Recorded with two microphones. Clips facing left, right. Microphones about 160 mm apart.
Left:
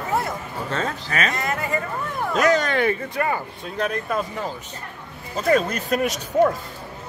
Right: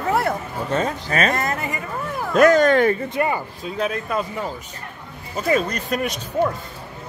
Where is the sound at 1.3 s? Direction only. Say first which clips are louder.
Right 3 dB; 45° right (ahead or behind).